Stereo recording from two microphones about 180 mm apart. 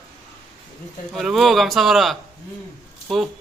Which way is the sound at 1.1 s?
Centre (ahead or behind).